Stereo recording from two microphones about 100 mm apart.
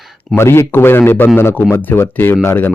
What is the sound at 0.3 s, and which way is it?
Speech, 25° left (ahead or behind).